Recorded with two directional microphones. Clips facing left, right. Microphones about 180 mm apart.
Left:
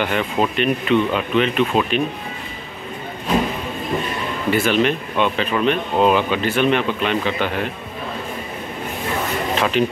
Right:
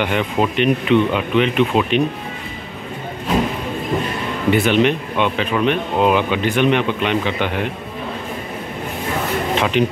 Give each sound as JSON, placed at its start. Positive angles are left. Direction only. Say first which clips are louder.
{"t": 0.0, "sound": "speech", "louder": "right 1 dB", "side_deg": -15}
{"t": 4.5, "sound": "speech", "louder": "right 3 dB", "side_deg": -20}
{"t": 9.6, "sound": "speech", "louder": "right 1 dB", "side_deg": -20}